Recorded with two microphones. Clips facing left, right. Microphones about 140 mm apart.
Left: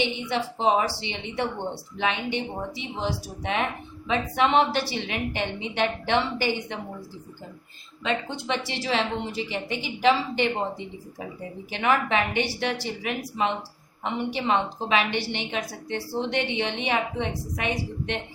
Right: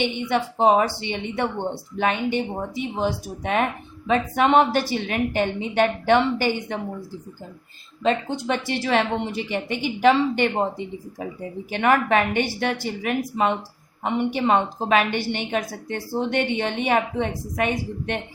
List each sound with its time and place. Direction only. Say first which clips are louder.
0.0 s a woman's voice: right 4 dB; 55° right (ahead or behind)
8.0 s a woman's voice: right 6 dB; 45° right (ahead or behind)
11.7 s a woman's voice: right 4 dB; 55° right (ahead or behind)